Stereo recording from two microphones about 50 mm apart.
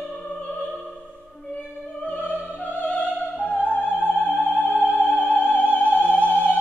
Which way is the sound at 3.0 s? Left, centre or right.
Right.